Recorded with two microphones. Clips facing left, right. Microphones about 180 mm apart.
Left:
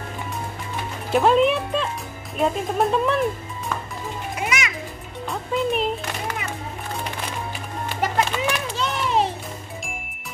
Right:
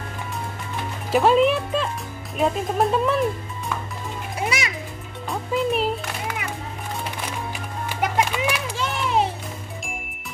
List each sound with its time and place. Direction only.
1.1 s speech: centre (ahead or behind)
4.5 s music: 35° right (ahead or behind)
5.3 s music: centre (ahead or behind)
8.0 s a sound: 10° right (ahead or behind)